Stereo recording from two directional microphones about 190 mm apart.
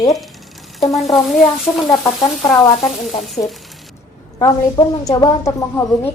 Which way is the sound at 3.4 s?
35° left (ahead or behind).